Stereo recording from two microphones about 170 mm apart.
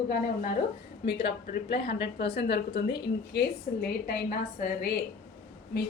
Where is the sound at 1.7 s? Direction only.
85° left.